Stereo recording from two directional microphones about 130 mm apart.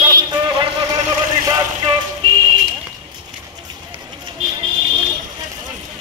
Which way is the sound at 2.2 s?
40° right (ahead or behind).